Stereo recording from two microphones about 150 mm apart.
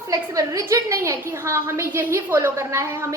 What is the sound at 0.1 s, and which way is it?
A woman's voice, 20° right (ahead or behind).